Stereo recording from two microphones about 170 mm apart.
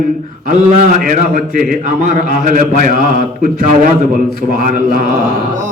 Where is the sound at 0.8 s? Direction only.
50° right (ahead or behind).